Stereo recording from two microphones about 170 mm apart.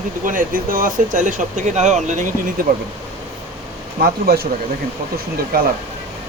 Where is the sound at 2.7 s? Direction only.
60° right (ahead or behind).